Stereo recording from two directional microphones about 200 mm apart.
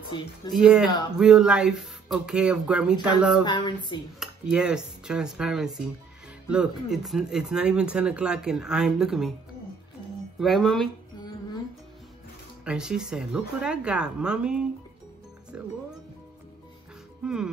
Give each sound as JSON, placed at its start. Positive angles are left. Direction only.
{"t": 0.5, "sound": "speech", "side_deg": -5}
{"t": 3.4, "sound": "speech", "side_deg": 25}
{"t": 4.2, "sound": "speech", "side_deg": -5}
{"t": 10.4, "sound": "speech", "side_deg": 0}
{"t": 12.6, "sound": "speech", "side_deg": -5}
{"t": 17.2, "sound": "speech", "side_deg": -5}